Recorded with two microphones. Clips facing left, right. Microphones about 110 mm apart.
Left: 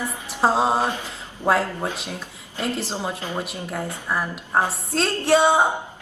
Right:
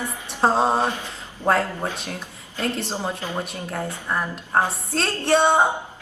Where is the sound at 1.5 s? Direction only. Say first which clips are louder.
Even; centre (ahead or behind).